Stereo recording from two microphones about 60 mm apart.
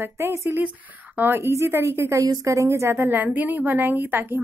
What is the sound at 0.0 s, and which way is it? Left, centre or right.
Speech, right.